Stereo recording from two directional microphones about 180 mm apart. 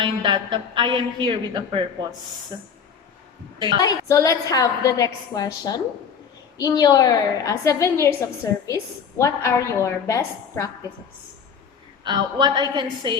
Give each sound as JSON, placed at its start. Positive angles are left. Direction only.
{"t": 0.0, "sound": "a woman's voice", "side_deg": -25}
{"t": 3.8, "sound": "a woman's voice", "side_deg": 20}
{"t": 12.0, "sound": "a woman's voice", "side_deg": -25}